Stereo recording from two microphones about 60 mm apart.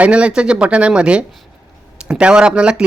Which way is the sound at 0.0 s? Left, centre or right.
Centre.